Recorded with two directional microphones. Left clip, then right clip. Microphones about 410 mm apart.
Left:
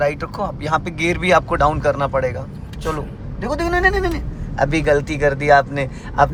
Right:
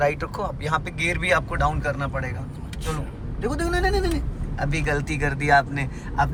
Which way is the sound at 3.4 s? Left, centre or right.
Centre.